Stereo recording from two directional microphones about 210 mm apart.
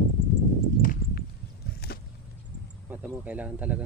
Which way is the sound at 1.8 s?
50° left (ahead or behind).